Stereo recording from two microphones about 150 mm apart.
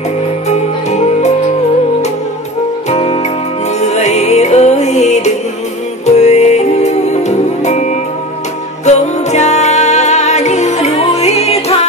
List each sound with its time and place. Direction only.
0.5 s music: 50° left (ahead or behind)
2.9 s music: 45° left (ahead or behind)